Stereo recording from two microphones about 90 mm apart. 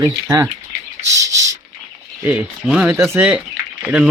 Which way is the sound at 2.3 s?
15° right (ahead or behind).